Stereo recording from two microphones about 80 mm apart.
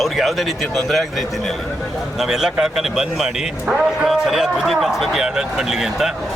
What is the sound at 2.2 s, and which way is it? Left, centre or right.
A man's voice, centre.